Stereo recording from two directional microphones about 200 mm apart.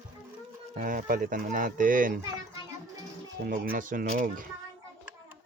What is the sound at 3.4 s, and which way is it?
Speech, 45° right (ahead or behind).